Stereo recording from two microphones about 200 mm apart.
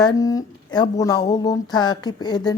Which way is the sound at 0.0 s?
15° left (ahead or behind).